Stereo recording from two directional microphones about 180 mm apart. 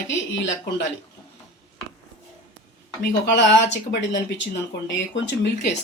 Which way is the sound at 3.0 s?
75° left (ahead or behind).